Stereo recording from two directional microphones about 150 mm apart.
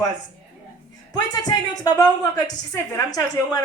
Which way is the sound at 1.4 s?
25° left (ahead or behind).